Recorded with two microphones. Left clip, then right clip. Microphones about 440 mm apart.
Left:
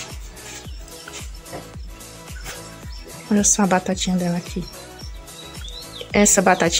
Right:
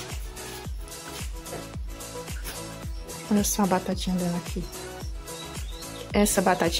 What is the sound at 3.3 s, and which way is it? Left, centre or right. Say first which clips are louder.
Speech: left 7 dB; right.